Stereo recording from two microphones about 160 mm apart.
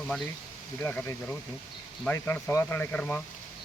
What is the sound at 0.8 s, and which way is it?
Speech, 15° left (ahead or behind).